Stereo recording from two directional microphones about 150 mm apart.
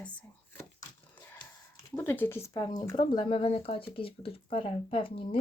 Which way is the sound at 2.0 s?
15° left (ahead or behind).